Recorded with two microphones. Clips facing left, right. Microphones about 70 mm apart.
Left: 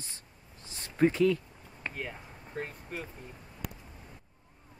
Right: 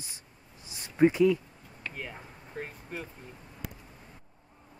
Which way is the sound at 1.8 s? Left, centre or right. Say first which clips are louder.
Left 1 dB; left.